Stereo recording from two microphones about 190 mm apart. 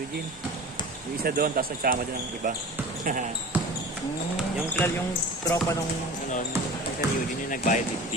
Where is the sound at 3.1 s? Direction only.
45° right (ahead or behind).